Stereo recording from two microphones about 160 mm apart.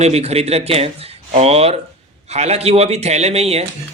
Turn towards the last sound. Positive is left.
turn(degrees=-40)  # may be behind; listen again after turning